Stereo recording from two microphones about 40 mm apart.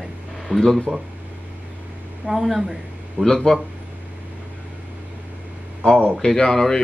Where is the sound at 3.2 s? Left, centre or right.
Centre.